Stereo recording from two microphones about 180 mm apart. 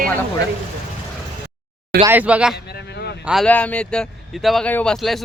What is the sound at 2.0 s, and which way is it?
Speech, 10° right (ahead or behind).